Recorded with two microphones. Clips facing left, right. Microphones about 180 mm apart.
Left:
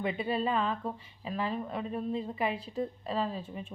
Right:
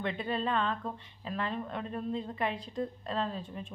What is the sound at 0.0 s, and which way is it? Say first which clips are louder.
A woman's voice: left 2 dB; 5° left (ahead or behind).